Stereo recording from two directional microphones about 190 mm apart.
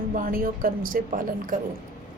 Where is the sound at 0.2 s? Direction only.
50° right (ahead or behind).